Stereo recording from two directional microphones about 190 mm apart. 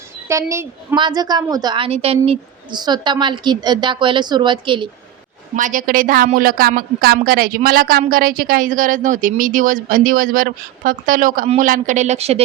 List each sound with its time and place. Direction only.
0.3 s a woman's voice: 15° right (ahead or behind)
5.5 s a woman's voice: 45° right (ahead or behind)